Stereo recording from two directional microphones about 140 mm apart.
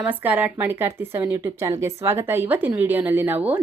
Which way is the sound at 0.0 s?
10° right (ahead or behind).